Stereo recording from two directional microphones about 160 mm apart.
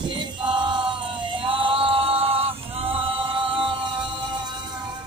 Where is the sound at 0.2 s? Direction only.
30° right (ahead or behind).